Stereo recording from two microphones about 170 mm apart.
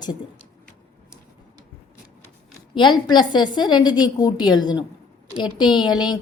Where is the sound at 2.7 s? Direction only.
25° left (ahead or behind).